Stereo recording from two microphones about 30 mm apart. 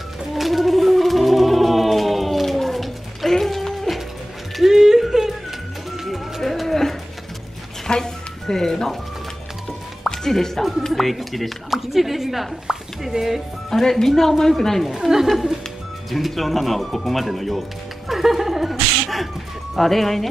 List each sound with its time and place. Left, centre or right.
0.3 s music: centre
3.3 s a sound: centre
4.6 s a sound: centre
6.4 s livestock: centre
6.7 s a sound: centre
8.0 s music: centre
10.0 s music: centre
10.9 s a woman's voice: centre
12.7 s a sound: right
13.1 s speech: right
13.7 s speech: centre
14.9 s a woman's voice: centre
16.1 s music: centre
19.8 s speech: centre